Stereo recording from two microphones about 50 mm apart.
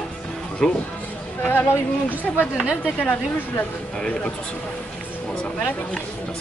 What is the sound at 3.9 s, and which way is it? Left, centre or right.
Speech, centre.